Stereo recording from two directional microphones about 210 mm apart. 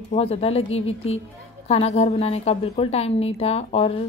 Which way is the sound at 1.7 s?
30° left (ahead or behind).